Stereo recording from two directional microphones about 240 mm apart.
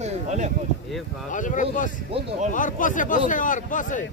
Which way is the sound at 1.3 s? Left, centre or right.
Left.